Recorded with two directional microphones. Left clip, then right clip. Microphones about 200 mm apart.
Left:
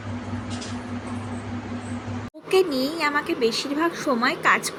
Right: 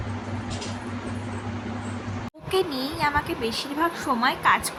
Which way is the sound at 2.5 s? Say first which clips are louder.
Left 4 dB; 15° left (ahead or behind).